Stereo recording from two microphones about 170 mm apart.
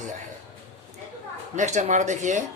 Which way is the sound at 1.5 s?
45° right (ahead or behind).